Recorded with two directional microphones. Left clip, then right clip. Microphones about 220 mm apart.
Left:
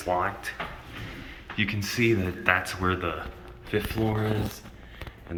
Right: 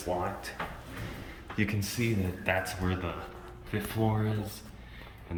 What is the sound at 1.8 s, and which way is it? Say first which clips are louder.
Speech: left 8 dB; 5° right (ahead or behind).